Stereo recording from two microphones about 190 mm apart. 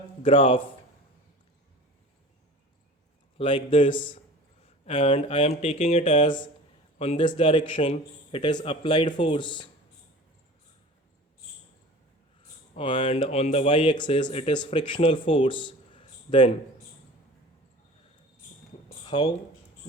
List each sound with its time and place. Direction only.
0.2 s speech: 30° left (ahead or behind)
3.3 s speech: 30° left (ahead or behind)
12.7 s speech: 25° left (ahead or behind)
19.0 s speech: 25° left (ahead or behind)